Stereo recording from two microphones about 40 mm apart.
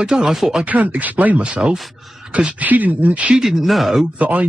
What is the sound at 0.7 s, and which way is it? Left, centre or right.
Speech, right.